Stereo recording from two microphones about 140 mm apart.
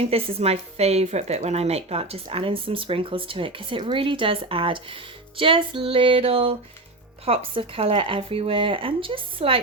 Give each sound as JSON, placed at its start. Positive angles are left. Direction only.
{"t": 0.0, "sound": "speech", "side_deg": -45}